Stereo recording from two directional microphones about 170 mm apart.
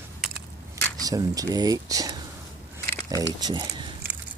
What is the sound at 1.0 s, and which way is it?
Speech, 20° right (ahead or behind).